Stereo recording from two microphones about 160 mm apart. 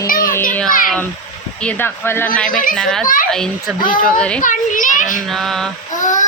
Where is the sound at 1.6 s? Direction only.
10° left (ahead or behind).